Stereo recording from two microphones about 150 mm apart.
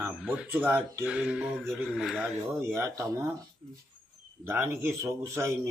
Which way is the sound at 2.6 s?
20° right (ahead or behind).